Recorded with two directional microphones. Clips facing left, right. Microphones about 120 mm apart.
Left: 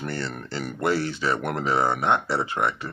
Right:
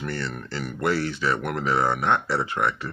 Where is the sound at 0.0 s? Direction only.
30° left (ahead or behind).